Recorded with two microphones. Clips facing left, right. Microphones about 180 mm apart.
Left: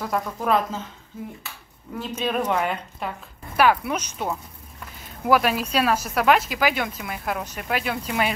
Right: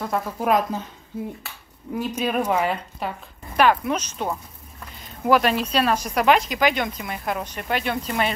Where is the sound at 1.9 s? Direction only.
10° right (ahead or behind).